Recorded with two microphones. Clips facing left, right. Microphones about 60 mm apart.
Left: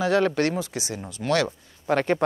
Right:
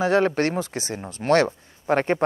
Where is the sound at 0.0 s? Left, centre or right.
Right.